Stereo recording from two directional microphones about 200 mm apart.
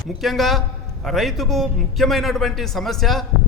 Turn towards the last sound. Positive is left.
turn(degrees=0)  # may be behind; listen again after turning